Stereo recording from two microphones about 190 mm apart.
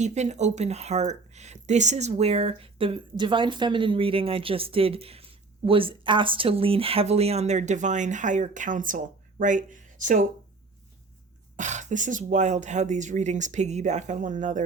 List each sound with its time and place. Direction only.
0.0 s speech: 35° right (ahead or behind)
11.5 s speech: 40° right (ahead or behind)